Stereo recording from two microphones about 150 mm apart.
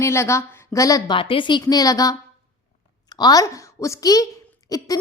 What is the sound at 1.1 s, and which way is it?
A woman's voice, 35° left (ahead or behind).